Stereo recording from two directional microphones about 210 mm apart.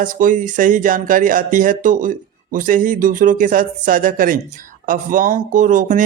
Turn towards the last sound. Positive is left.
turn(degrees=-35)  # may be behind; listen again after turning